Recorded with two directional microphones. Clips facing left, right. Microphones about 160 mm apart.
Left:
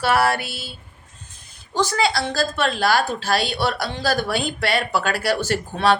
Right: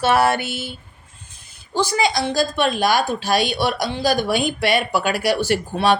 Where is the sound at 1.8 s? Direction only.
15° right (ahead or behind).